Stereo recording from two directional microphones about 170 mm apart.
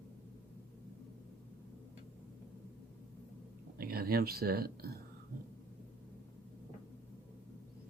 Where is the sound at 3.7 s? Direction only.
60° right (ahead or behind).